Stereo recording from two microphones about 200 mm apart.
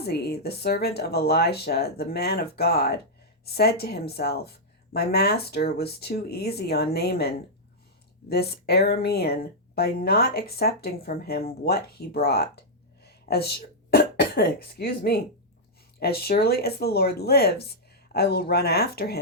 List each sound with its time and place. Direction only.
0.0 s a woman's voice: 55° left (ahead or behind)
8.3 s a woman's voice: 55° left (ahead or behind)